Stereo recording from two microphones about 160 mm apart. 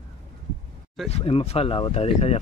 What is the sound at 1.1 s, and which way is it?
Speech, 35° left (ahead or behind).